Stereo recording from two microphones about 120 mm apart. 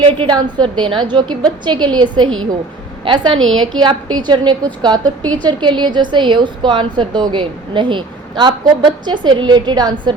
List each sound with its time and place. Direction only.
0.2 s a woman's voice: 40° right (ahead or behind)